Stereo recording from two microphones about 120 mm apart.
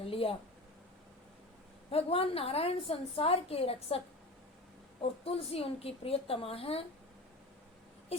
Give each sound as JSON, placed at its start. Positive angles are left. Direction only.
{"t": 0.0, "sound": "speech", "side_deg": 50}
{"t": 1.9, "sound": "a woman's voice", "side_deg": 55}